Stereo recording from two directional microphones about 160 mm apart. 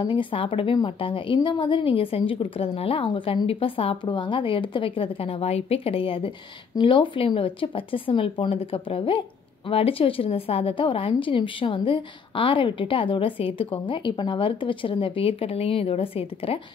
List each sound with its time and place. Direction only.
0.0 s a woman's voice: 30° left (ahead or behind)